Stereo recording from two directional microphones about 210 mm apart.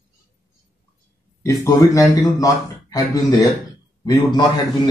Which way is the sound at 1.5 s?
15° left (ahead or behind).